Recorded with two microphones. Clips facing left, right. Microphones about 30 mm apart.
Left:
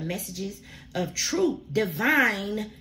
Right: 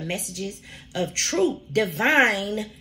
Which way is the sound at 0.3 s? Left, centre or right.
Right.